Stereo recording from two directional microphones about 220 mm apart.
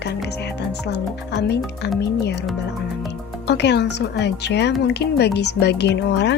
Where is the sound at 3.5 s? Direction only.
50° left (ahead or behind).